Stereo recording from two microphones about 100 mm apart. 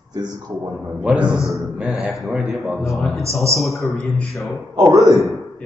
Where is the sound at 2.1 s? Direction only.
Centre (ahead or behind).